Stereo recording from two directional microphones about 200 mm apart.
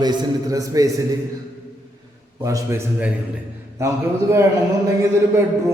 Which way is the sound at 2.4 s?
15° right (ahead or behind).